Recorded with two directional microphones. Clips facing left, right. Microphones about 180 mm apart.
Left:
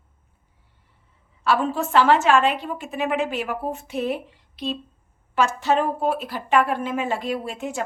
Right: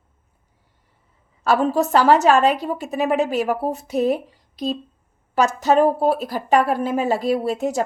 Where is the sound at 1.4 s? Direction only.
40° right (ahead or behind).